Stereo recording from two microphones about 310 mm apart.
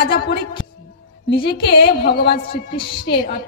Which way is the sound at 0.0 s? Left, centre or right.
Left.